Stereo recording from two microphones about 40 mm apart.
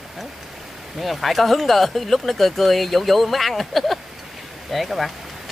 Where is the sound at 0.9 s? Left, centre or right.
Centre.